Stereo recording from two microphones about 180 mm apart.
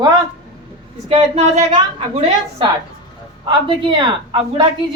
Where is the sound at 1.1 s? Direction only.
35° right (ahead or behind).